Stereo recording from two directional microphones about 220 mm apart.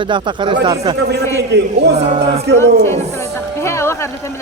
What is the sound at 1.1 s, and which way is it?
Speech, 50° right (ahead or behind).